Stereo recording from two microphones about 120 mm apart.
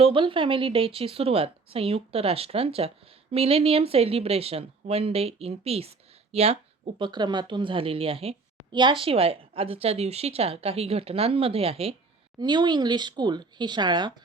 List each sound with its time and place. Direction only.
0.0 s a woman's voice: 45° right (ahead or behind)
7.0 s a woman's voice: 40° right (ahead or behind)
8.7 s a woman's voice: 40° right (ahead or behind)
12.4 s speech: 35° right (ahead or behind)